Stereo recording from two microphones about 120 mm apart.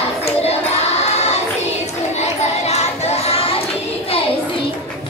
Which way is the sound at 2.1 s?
65° left (ahead or behind).